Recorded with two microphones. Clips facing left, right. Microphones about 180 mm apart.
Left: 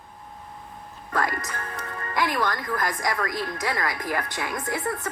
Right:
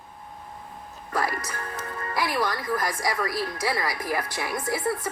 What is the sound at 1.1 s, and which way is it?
A woman's voice, 10° right (ahead or behind).